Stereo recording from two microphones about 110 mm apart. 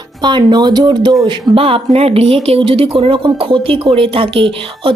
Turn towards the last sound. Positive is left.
turn(degrees=-55)  # may be behind; listen again after turning